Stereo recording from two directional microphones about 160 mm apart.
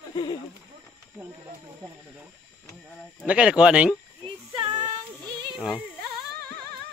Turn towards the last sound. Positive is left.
turn(degrees=0)  # may be behind; listen again after turning